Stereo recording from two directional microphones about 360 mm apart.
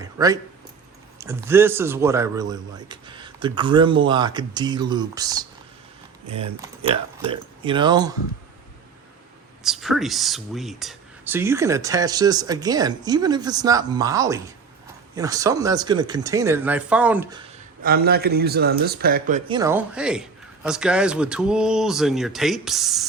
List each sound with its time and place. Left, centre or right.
0.0 s a sound: centre
1.2 s speech: centre
9.6 s speech: centre
17.8 s a man's voice: right
19.5 s speech: centre